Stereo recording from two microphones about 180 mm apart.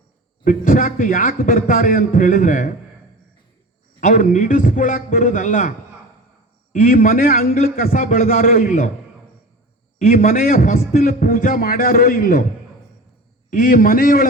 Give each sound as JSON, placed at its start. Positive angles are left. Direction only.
{"t": 0.4, "sound": "a man's voice", "side_deg": 50}
{"t": 4.0, "sound": "a man's voice", "side_deg": 45}
{"t": 6.7, "sound": "a man's voice", "side_deg": 45}
{"t": 10.0, "sound": "a man's voice", "side_deg": 50}
{"t": 13.5, "sound": "a man's voice", "side_deg": 50}